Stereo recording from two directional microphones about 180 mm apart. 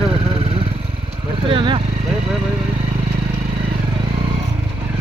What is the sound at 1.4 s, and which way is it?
Speech, 30° right (ahead or behind).